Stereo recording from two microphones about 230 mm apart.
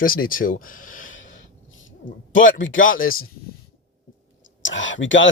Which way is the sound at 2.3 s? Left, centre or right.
Left.